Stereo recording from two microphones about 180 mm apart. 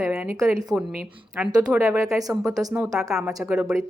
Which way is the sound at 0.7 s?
5° right (ahead or behind).